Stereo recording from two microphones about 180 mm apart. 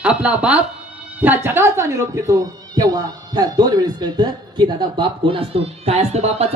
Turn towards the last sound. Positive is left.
turn(degrees=-35)  # may be behind; listen again after turning